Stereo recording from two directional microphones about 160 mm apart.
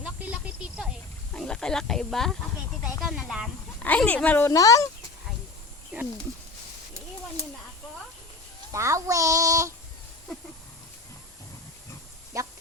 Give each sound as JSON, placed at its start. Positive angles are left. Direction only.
{"t": 0.0, "sound": "a sound", "side_deg": -5}
{"t": 1.3, "sound": "speech", "side_deg": 5}
{"t": 3.0, "sound": "snake", "side_deg": -5}
{"t": 3.8, "sound": "speech", "side_deg": 10}
{"t": 8.7, "sound": "speech", "side_deg": -20}
{"t": 12.3, "sound": "a sound", "side_deg": -20}